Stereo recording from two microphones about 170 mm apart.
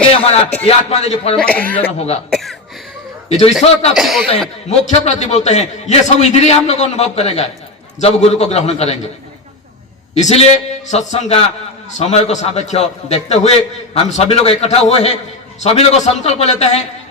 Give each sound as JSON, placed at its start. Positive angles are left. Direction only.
{"t": 0.1, "sound": "a sound", "side_deg": 35}
{"t": 0.6, "sound": "a man's voice", "side_deg": 40}
{"t": 1.4, "sound": "speech", "side_deg": 5}
{"t": 2.0, "sound": "a man's voice", "side_deg": 40}
{"t": 2.3, "sound": "a sound", "side_deg": 0}
{"t": 3.2, "sound": "a man's voice", "side_deg": 40}
{"t": 3.9, "sound": "speech", "side_deg": 0}
{"t": 4.7, "sound": "a man's voice", "side_deg": 40}
{"t": 10.2, "sound": "a man's voice", "side_deg": 40}